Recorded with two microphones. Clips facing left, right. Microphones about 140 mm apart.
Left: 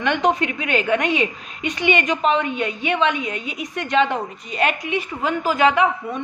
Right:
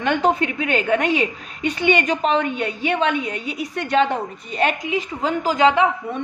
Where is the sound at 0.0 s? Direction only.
35° right (ahead or behind).